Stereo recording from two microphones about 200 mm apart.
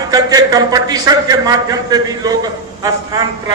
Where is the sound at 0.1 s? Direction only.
20° right (ahead or behind).